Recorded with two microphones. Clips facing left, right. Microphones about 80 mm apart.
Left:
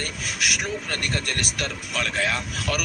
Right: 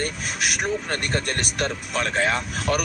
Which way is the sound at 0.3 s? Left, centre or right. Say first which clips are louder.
Right 2 dB; right.